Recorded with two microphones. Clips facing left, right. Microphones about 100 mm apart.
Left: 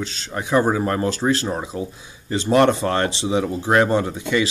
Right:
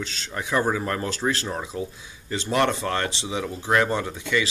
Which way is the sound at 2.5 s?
35° left (ahead or behind).